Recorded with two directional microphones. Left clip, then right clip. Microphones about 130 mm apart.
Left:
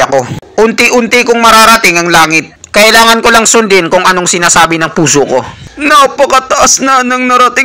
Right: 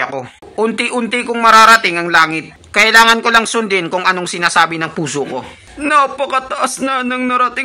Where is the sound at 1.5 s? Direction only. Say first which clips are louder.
Left 1 dB; 35° left (ahead or behind).